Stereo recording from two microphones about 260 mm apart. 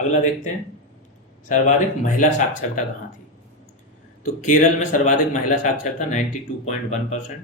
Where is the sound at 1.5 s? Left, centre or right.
Left.